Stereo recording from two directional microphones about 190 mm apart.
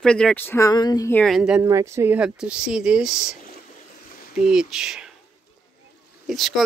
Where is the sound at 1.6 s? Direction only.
15° right (ahead or behind).